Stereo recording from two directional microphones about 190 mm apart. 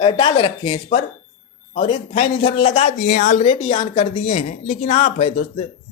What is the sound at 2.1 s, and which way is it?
Speech, 45° left (ahead or behind).